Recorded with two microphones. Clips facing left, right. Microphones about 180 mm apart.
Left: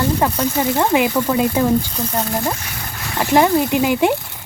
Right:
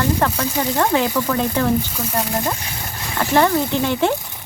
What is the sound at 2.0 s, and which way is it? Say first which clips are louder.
Speech: left 1 dB; 10° right (ahead or behind).